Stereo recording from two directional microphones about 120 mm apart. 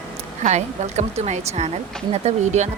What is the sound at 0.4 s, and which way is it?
Speech, 70° right (ahead or behind).